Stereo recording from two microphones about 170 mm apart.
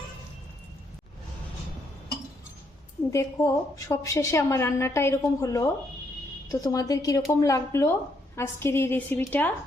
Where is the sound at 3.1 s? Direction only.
20° left (ahead or behind).